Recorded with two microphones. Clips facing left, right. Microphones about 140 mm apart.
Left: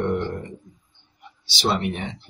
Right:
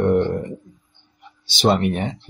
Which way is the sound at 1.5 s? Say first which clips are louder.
Right 6 dB; 50° right (ahead or behind).